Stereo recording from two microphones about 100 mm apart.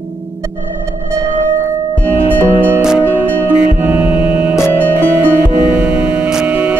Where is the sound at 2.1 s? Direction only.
25° right (ahead or behind).